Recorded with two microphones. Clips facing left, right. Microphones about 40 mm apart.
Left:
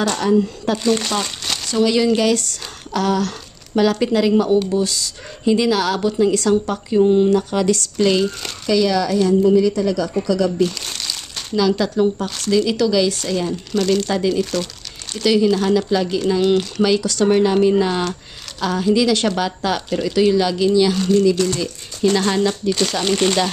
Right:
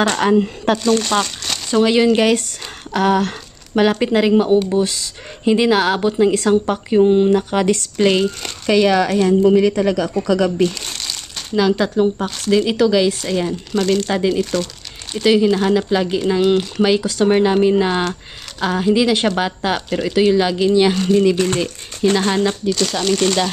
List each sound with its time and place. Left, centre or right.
0.0 s speech: right
0.8 s speech: centre
1.2 s crumpling: centre
1.7 s speech: right
8.6 s speech: right
10.9 s crumpling: centre
11.8 s speech: right
14.0 s speech: right
14.4 s speech: centre
15.1 s speech: right
16.3 s speech: centre; by 22.1 s right
22.1 s speech: centre
22.7 s speech: centre